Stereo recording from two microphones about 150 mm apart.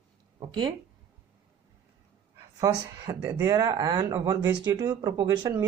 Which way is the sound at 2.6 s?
20° right (ahead or behind).